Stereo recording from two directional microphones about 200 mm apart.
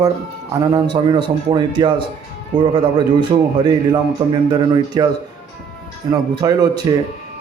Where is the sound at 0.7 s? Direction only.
25° right (ahead or behind).